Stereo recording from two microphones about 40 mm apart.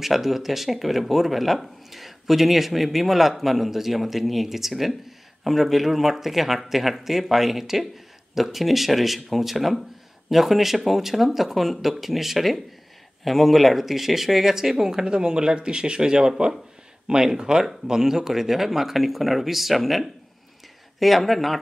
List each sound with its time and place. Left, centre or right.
0.0 s speech: centre
15.0 s speech: right; by 21.5 s centre